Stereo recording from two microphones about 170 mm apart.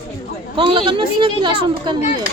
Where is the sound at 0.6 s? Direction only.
30° right (ahead or behind).